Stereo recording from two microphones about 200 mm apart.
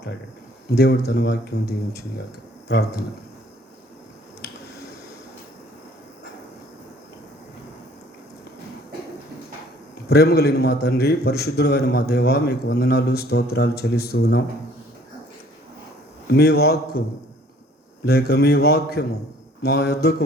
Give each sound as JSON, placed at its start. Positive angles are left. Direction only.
{"t": 0.7, "sound": "speech", "side_deg": 55}
{"t": 10.1, "sound": "a man's voice", "side_deg": 55}
{"t": 16.3, "sound": "a man's voice", "side_deg": 55}
{"t": 18.0, "sound": "a man's voice", "side_deg": 50}